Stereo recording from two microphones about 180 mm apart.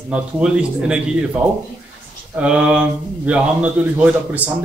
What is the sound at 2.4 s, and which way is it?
Speech, 5° right (ahead or behind).